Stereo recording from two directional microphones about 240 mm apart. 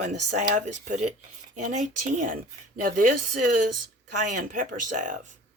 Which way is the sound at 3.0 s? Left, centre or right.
Right.